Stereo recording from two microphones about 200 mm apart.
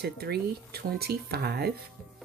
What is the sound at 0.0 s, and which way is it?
Speech, 55° right (ahead or behind).